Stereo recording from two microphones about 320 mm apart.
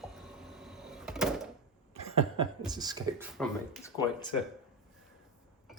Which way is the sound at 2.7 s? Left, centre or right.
Centre.